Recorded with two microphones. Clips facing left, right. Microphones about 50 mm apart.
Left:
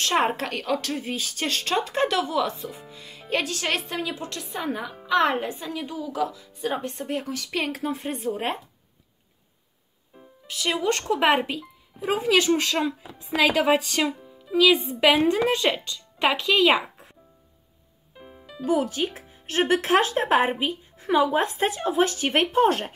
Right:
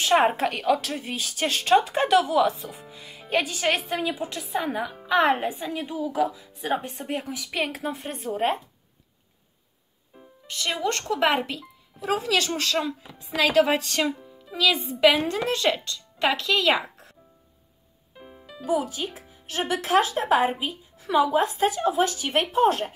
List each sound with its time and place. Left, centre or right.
0.0 s speech: centre
10.1 s a woman's voice: centre
18.1 s music: centre
19.1 s speech: left